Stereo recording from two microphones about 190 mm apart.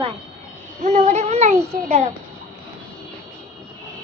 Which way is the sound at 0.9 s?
40° right (ahead or behind).